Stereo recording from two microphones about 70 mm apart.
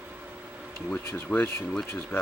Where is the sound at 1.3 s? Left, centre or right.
Left.